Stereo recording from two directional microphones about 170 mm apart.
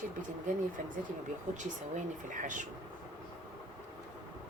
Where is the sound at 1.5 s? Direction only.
50° right (ahead or behind).